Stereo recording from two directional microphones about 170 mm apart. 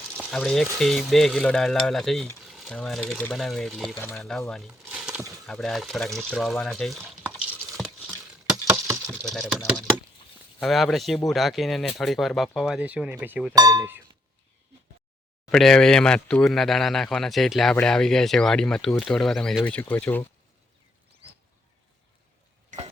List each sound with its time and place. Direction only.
0.3 s speech: 5° left (ahead or behind)
3.9 s speech: 15° left (ahead or behind); by 8.1 s 5° right (ahead or behind)
8.1 s a sound: 15° right (ahead or behind)
9.2 s speech: centre (ahead or behind)
13.6 s speech: 20° right (ahead or behind)
15.5 s speech: centre (ahead or behind)